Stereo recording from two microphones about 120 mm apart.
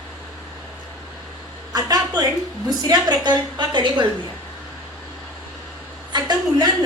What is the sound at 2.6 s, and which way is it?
A woman's voice, 35° right (ahead or behind).